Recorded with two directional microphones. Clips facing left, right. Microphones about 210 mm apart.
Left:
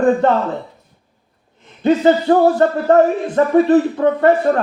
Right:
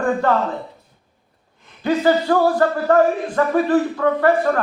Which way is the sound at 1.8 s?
25° left (ahead or behind).